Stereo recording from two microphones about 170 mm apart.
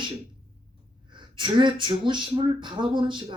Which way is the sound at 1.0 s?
30° right (ahead or behind).